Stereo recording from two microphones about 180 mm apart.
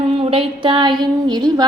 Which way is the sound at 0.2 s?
30° right (ahead or behind).